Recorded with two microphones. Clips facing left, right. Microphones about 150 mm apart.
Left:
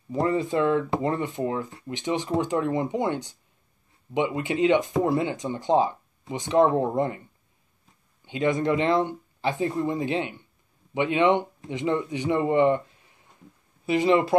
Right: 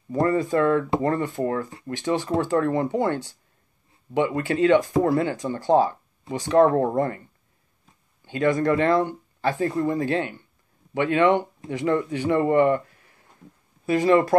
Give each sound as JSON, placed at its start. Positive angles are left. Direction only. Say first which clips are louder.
{"t": 0.2, "sound": "speech", "louder": "right 3 dB", "side_deg": 20}
{"t": 8.3, "sound": "speech", "louder": "right 2 dB", "side_deg": 20}